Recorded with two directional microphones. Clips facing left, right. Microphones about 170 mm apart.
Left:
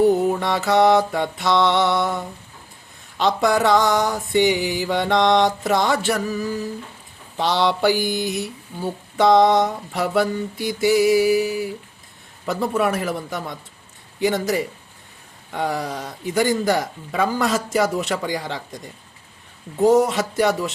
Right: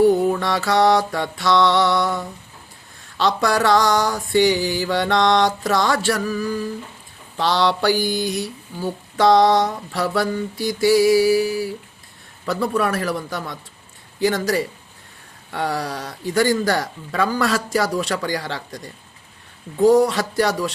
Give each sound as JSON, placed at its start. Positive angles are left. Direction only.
{"t": 0.3, "sound": "mantra", "side_deg": 20}
{"t": 7.9, "sound": "speech", "side_deg": 0}
{"t": 9.1, "sound": "mantra", "side_deg": 20}
{"t": 16.3, "sound": "speech", "side_deg": 0}
{"t": 16.8, "sound": "mantra", "side_deg": 20}
{"t": 19.8, "sound": "mantra", "side_deg": 20}